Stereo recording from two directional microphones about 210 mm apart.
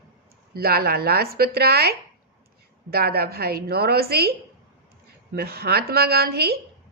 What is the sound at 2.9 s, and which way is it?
Speech, 45° right (ahead or behind).